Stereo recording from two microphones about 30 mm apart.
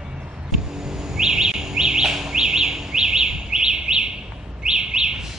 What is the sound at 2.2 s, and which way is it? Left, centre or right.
Bird vocalization, right.